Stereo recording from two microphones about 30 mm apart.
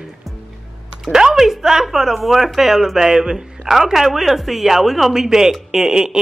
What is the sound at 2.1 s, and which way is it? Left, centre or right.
Speech, centre.